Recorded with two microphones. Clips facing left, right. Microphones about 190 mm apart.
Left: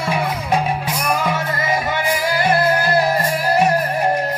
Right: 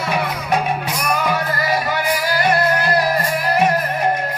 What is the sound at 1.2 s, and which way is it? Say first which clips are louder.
Music: right 1 dB; 25° left (ahead or behind).